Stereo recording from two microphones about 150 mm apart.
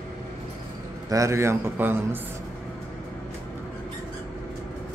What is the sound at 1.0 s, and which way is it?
A man's voice, 20° right (ahead or behind).